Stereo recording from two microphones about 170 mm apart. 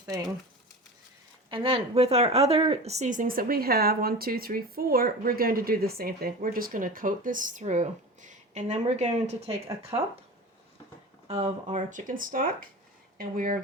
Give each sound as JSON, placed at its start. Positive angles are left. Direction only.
{"t": 0.0, "sound": "speech", "side_deg": -20}
{"t": 1.5, "sound": "speech", "side_deg": -30}
{"t": 9.9, "sound": "speech", "side_deg": -25}
{"t": 11.3, "sound": "speech", "side_deg": -40}